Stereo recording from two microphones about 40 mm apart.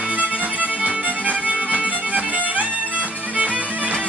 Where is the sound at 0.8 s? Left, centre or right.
Right.